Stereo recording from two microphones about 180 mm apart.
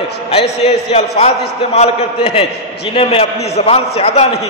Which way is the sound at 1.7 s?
35° left (ahead or behind).